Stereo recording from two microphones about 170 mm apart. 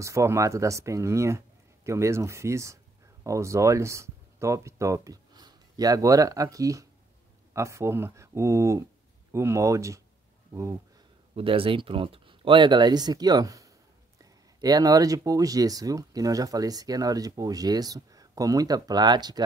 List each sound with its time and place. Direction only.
0.0 s speech: 15° right (ahead or behind)
11.3 s speech: 30° right (ahead or behind)